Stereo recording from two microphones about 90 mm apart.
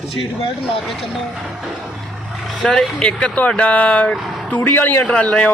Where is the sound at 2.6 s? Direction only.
10° left (ahead or behind).